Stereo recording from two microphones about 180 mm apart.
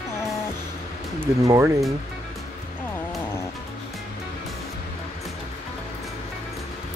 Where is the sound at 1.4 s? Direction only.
15° right (ahead or behind).